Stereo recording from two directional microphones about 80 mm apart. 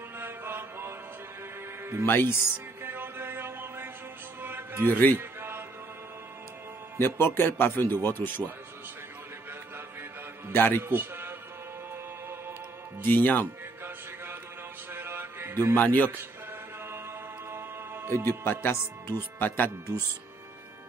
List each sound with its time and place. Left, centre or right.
0.2 s mantra: right
2.0 s speech: left
2.8 s music: right
4.8 s speech: left
5.1 s music: right
7.0 s speech: left
10.5 s speech: left
10.8 s a man's voice: right
13.0 s speech: left
14.9 s a sound: right
15.7 s speech: left
17.5 s music: right
18.4 s speech: left